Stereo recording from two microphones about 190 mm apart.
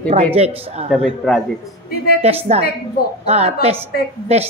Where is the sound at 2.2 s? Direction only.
35° right (ahead or behind).